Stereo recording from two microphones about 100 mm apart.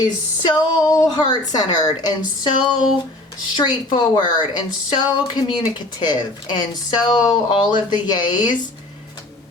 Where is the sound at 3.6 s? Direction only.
45° left (ahead or behind).